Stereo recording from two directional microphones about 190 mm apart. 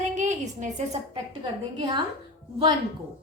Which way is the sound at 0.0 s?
40° right (ahead or behind).